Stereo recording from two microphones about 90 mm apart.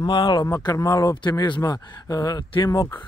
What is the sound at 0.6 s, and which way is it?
Speech, 40° left (ahead or behind).